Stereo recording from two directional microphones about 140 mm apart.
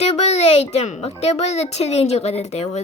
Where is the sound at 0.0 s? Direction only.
50° left (ahead or behind).